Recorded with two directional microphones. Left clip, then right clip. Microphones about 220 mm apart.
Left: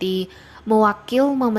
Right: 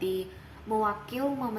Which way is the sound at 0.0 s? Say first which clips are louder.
Left 7 dB; 40° left (ahead or behind).